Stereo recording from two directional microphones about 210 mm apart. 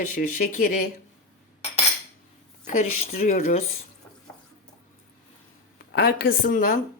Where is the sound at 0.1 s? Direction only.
40° left (ahead or behind).